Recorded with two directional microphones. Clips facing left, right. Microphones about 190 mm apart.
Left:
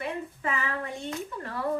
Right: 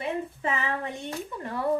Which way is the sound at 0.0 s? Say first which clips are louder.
Right 3 dB; 25° right (ahead or behind).